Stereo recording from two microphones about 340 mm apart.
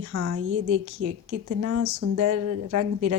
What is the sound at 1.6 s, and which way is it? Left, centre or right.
A woman's voice, right.